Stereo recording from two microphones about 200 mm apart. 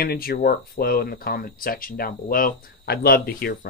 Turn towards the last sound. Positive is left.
turn(degrees=50)  # may be behind; listen again after turning